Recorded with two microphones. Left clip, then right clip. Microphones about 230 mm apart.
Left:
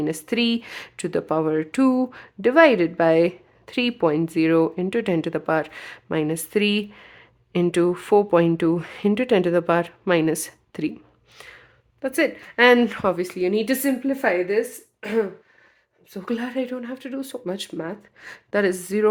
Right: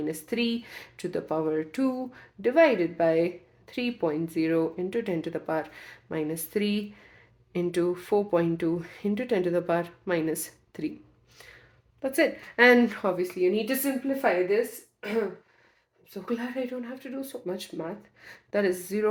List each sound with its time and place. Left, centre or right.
0.0 s speech: left
11.3 s a sound: left
12.0 s speech: left
16.1 s speech: left